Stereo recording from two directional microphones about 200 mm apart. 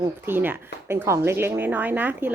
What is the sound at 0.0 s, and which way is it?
Speech, 10° right (ahead or behind).